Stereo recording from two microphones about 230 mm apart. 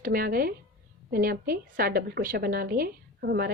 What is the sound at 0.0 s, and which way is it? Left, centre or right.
A woman's voice, right.